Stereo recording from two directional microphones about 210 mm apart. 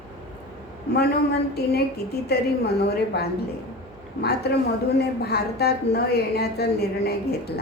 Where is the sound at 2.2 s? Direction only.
50° left (ahead or behind).